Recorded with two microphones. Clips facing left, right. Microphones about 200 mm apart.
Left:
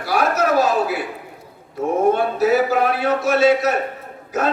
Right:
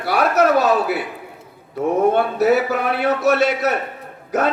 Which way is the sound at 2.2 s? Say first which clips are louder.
Right 1 dB; 60° right (ahead or behind).